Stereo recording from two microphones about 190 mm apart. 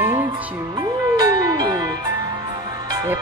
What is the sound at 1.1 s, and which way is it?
Music, 20° right (ahead or behind).